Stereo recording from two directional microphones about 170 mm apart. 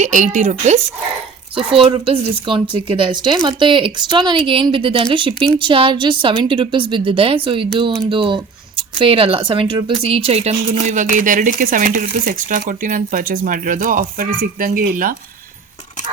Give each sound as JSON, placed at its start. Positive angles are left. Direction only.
{"t": 0.0, "sound": "a woman's voice", "side_deg": -45}